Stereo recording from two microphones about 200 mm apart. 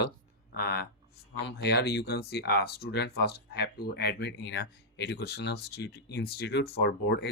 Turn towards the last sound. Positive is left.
turn(degrees=55)  # may be behind; listen again after turning